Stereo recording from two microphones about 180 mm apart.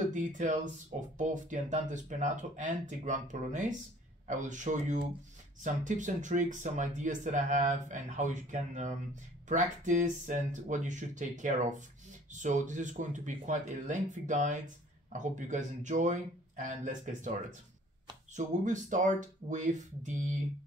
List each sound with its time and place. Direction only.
0.1 s speech: 45° right (ahead or behind)